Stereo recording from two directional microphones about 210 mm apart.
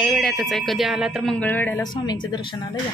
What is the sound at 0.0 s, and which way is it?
Speech, centre (ahead or behind).